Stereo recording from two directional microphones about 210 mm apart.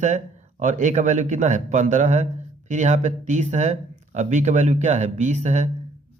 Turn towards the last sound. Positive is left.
turn(degrees=-35)  # may be behind; listen again after turning